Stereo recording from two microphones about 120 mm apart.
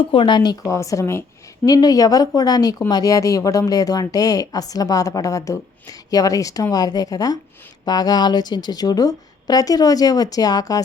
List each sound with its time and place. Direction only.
0.0 s a woman's voice: 45° left (ahead or behind); by 10.8 s 30° left (ahead or behind)